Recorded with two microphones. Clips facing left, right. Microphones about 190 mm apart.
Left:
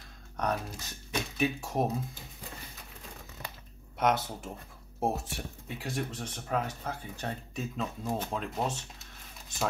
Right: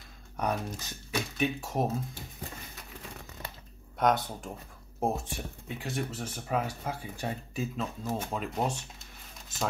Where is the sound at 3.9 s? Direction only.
5° left (ahead or behind).